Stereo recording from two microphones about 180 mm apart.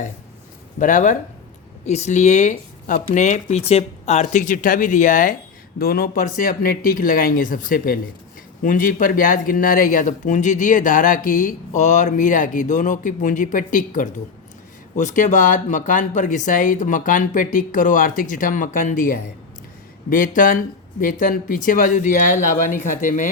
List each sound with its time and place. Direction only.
0.8 s speech: 45° left (ahead or behind)
5.8 s speech: 55° left (ahead or behind)